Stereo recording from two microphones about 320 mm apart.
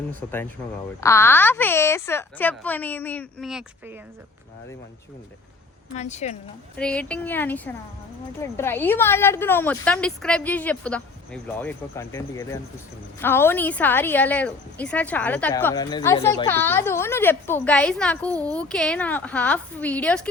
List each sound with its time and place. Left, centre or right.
0.1 s a woman's voice: centre
6.0 s speech: left
6.7 s a woman's voice: centre